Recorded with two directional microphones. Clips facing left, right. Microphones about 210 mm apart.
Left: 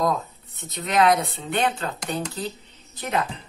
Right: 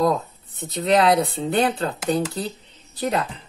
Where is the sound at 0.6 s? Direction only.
30° right (ahead or behind).